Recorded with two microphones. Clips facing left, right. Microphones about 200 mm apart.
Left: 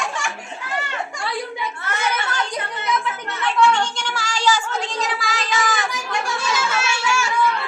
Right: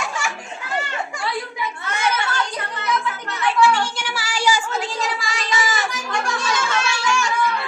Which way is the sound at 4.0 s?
10° right (ahead or behind).